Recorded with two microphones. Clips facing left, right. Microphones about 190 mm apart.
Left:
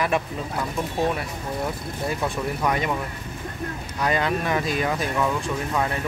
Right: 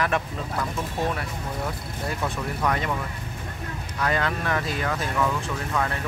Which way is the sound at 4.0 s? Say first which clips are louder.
Left 2 dB; 15° left (ahead or behind).